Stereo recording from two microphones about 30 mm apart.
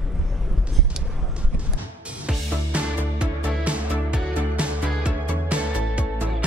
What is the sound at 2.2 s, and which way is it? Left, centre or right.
Music, right.